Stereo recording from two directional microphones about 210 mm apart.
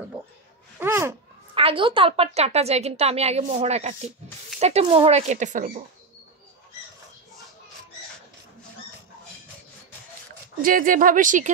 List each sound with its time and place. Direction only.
0.7 s a sound: 10° right (ahead or behind)
1.5 s a woman's voice: 25° right (ahead or behind)
10.6 s speech: 40° right (ahead or behind)